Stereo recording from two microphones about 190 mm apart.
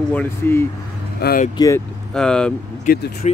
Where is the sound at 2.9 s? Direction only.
45° left (ahead or behind).